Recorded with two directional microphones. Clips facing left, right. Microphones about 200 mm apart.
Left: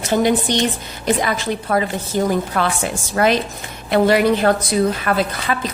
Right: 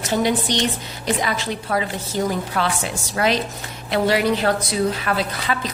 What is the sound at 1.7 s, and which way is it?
Speech, 50° left (ahead or behind).